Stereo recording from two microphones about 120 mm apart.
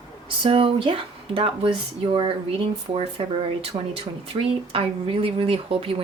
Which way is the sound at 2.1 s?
45° right (ahead or behind).